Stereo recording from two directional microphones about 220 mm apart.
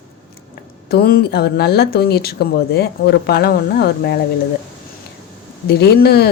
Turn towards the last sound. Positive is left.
turn(degrees=45)  # may be behind; listen again after turning